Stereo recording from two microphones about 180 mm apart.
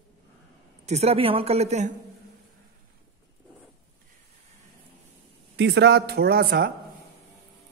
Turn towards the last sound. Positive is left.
turn(degrees=-55)  # may be behind; listen again after turning